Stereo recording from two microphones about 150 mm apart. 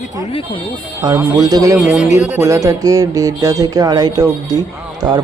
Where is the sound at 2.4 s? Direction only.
20° right (ahead or behind).